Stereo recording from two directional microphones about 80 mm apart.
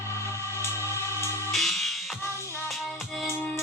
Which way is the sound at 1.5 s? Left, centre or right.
Centre.